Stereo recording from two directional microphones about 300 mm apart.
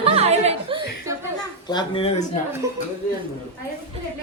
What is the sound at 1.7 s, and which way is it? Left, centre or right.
Speech, centre.